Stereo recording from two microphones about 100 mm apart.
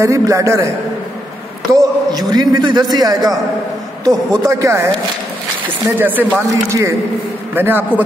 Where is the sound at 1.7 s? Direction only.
40° right (ahead or behind).